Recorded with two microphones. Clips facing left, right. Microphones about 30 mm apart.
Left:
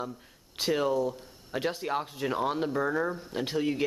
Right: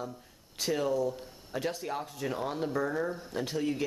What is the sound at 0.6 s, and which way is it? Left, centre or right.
Speech, left.